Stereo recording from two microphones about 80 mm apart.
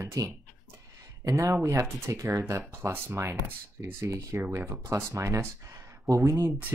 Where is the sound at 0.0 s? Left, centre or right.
Right.